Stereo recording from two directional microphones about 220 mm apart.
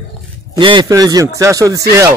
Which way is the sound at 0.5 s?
20° right (ahead or behind).